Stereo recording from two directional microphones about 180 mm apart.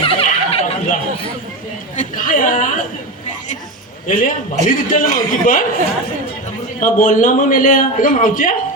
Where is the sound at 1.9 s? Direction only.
50° left (ahead or behind).